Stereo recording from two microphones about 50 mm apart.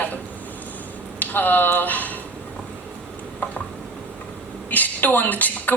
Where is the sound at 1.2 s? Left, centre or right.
Left.